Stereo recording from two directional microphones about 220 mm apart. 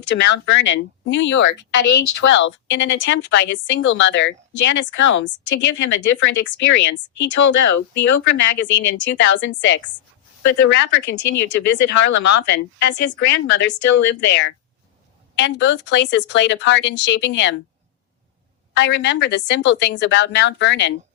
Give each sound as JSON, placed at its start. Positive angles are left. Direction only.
{"t": 0.1, "sound": "speech", "side_deg": 50}
{"t": 18.7, "sound": "speech", "side_deg": 55}